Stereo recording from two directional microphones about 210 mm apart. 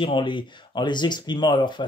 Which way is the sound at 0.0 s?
25° left (ahead or behind).